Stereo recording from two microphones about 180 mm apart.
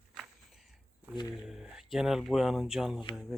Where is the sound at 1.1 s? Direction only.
25° left (ahead or behind).